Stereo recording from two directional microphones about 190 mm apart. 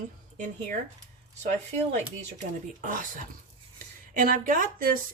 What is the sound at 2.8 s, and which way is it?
Speech, 45° right (ahead or behind).